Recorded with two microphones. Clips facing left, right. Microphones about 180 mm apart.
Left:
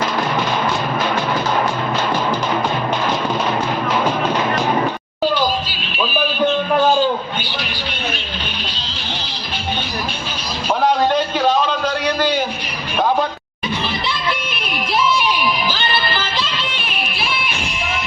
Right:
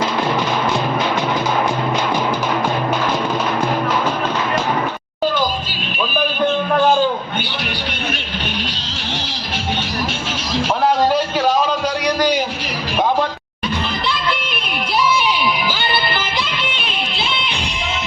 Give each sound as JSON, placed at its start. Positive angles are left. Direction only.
{"t": 16.4, "sound": "music", "side_deg": -15}